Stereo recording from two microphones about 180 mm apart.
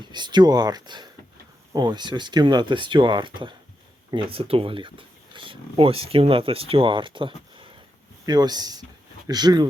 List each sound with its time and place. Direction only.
0.0 s speech: 25° right (ahead or behind)